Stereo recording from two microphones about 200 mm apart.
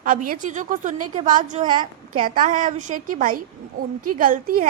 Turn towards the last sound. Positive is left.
turn(degrees=-45)  # may be behind; listen again after turning